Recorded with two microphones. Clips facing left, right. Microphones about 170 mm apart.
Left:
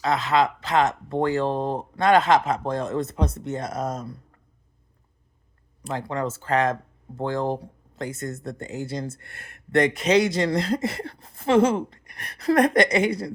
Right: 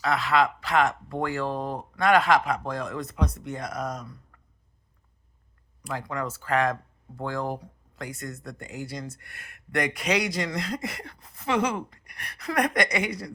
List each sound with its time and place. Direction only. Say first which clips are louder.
0.0 s speech: left 2 dB; 20° left (ahead or behind)
5.8 s speech: left 4 dB; 25° left (ahead or behind)